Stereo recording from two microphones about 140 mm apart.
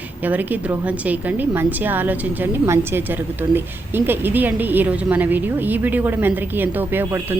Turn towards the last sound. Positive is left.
turn(degrees=-15)  # may be behind; listen again after turning